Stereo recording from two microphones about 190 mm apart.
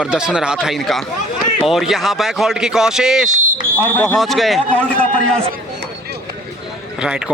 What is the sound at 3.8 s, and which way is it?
A man's voice, 10° left (ahead or behind).